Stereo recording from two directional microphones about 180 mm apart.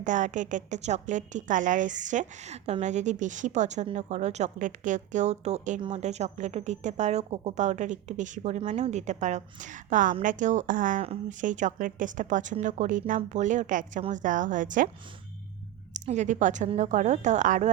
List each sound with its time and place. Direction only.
0.0 s a woman's voice: 45° right (ahead or behind)
15.9 s speech: 40° right (ahead or behind)